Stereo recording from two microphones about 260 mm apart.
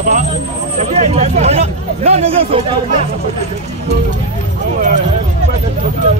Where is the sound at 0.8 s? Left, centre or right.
Right.